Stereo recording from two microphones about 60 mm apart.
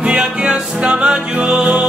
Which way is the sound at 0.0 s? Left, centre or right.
Centre.